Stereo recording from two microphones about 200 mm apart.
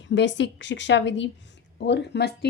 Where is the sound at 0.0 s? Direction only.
65° left (ahead or behind).